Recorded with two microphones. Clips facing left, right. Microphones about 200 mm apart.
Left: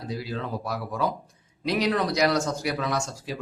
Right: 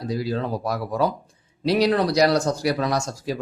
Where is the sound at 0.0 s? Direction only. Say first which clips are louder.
Right 6 dB; 40° right (ahead or behind).